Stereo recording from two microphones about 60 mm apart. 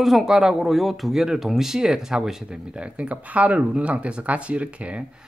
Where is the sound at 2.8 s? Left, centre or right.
Right.